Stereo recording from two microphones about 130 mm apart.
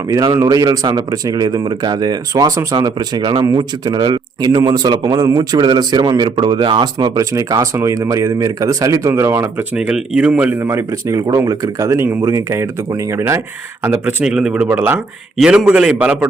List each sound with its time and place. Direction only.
0.3 s speech: 30° right (ahead or behind)
7.2 s speech: 25° right (ahead or behind)
9.7 s a man's voice: 5° right (ahead or behind)
10.3 s a man's voice: 20° right (ahead or behind)